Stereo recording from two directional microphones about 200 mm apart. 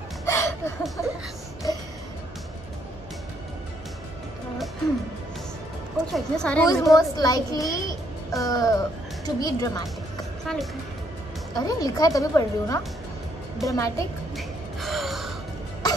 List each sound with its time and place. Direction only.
0.2 s chuckle: 15° left (ahead or behind)
1.0 s a woman's voice: 15° left (ahead or behind)
1.6 s music: 20° left (ahead or behind)
6.1 s a woman's voice: 5° left (ahead or behind)
6.7 s a woman's voice: 15° left (ahead or behind)
10.4 s a woman's voice: centre (ahead or behind)
11.5 s a woman's voice: 20° left (ahead or behind)
14.3 s gasp: centre (ahead or behind)